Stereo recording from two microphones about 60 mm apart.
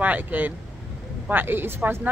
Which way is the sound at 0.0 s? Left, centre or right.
Right.